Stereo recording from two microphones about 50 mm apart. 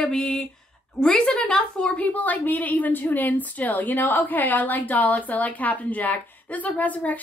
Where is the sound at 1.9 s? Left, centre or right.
Left.